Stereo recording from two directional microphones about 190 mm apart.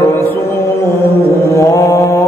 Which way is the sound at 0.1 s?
10° left (ahead or behind).